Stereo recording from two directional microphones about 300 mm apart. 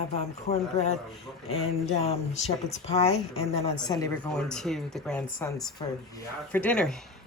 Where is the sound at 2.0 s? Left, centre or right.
Centre.